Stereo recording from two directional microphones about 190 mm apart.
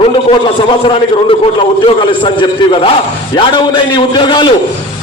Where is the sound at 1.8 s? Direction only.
30° left (ahead or behind).